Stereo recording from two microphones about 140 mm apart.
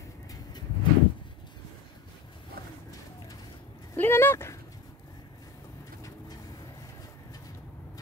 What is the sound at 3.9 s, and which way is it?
Speech, 15° left (ahead or behind).